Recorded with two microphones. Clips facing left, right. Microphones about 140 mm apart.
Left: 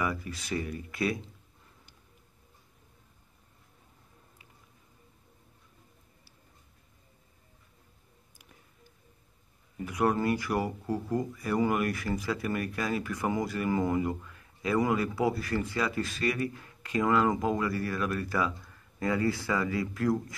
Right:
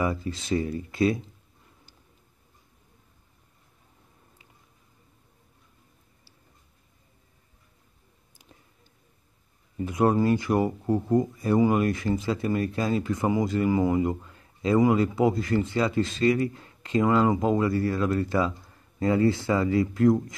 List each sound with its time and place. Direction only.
0.0 s speech: 25° right (ahead or behind)
9.8 s speech: 25° right (ahead or behind)